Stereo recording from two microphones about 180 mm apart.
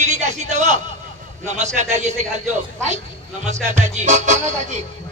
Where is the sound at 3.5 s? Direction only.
40° right (ahead or behind).